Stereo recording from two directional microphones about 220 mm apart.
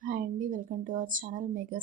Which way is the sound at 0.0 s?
40° right (ahead or behind).